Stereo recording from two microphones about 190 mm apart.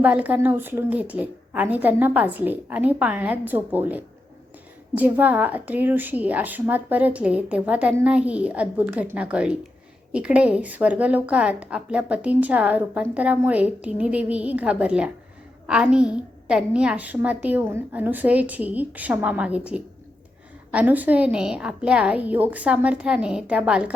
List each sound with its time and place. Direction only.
0.0 s a woman's voice: 10° right (ahead or behind)